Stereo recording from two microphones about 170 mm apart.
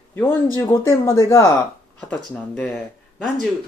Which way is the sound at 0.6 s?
15° left (ahead or behind).